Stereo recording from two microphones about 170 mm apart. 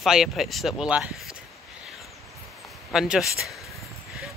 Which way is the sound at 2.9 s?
Centre (ahead or behind).